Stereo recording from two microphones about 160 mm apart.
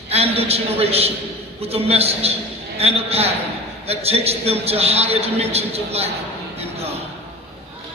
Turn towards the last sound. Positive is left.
turn(degrees=-40)  # may be behind; listen again after turning